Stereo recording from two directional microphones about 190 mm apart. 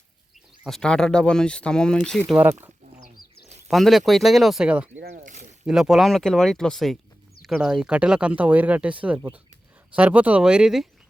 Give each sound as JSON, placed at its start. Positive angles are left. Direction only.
{"t": 0.6, "sound": "speech", "side_deg": 0}
{"t": 2.4, "sound": "speech", "side_deg": -10}
{"t": 5.1, "sound": "a sound", "side_deg": -45}
{"t": 5.6, "sound": "speech", "side_deg": -5}